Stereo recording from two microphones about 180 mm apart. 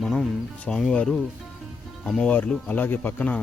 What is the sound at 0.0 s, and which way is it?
Speech, 5° left (ahead or behind).